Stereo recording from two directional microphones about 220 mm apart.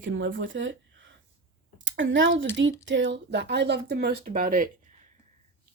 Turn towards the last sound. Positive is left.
turn(degrees=-40)  # may be behind; listen again after turning